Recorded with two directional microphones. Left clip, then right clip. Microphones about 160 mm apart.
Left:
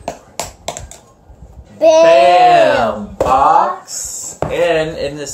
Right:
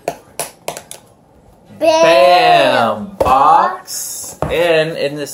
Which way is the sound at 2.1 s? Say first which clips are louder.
Left 1 dB; 20° right (ahead or behind).